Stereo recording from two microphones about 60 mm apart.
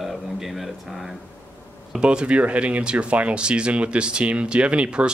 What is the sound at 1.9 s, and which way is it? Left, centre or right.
Speech, centre.